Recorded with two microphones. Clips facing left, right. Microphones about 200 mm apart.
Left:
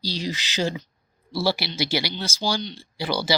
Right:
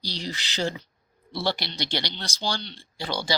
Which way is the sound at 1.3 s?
5° left (ahead or behind).